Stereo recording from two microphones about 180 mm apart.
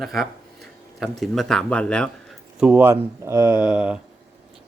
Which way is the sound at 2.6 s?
10° right (ahead or behind).